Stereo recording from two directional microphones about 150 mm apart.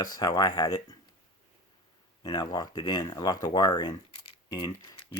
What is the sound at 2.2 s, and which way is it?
Speech, 25° left (ahead or behind).